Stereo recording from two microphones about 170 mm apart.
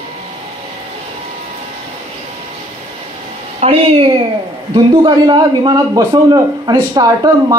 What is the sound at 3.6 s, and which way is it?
A man's voice, 35° right (ahead or behind).